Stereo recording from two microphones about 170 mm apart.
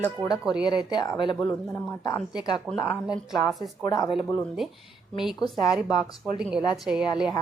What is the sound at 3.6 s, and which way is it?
Speech, 20° left (ahead or behind).